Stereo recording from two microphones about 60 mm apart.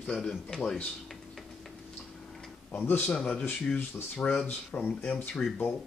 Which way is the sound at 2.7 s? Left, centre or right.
Left.